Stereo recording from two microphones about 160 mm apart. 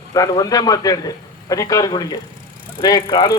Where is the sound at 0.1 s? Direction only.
20° left (ahead or behind).